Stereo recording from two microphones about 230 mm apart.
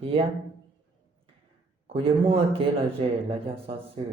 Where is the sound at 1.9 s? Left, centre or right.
Right.